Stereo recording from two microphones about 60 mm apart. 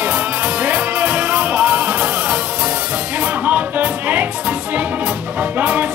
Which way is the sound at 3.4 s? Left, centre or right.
Right.